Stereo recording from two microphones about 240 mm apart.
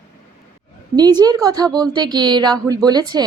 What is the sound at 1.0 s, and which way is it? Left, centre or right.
Speech, centre.